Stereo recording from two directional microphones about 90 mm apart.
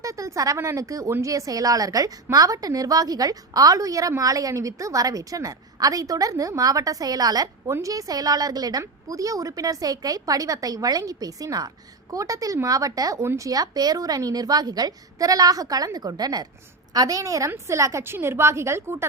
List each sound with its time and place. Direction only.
0.0 s a woman's voice: 35° right (ahead or behind)